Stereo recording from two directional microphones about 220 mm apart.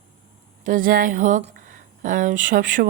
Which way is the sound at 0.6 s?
35° right (ahead or behind).